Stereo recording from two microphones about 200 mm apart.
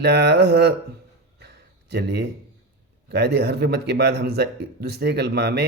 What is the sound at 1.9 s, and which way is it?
A man's voice, 55° right (ahead or behind).